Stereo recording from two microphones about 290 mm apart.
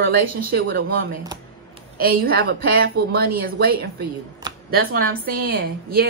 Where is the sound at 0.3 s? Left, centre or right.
Right.